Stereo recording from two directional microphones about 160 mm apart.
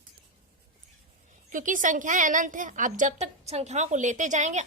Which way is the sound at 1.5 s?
55° right (ahead or behind).